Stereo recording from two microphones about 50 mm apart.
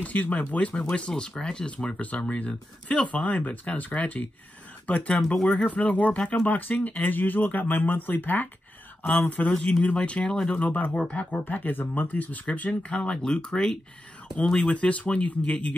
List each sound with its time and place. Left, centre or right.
0.0 s speech: left
2.0 s speech: left
5.3 s speech: centre
5.7 s speech: left
10.6 s speech: left
11.4 s speech: left; by 14.7 s centre
14.7 s speech: left